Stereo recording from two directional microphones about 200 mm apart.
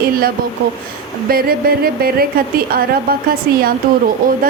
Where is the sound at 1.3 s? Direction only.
45° right (ahead or behind).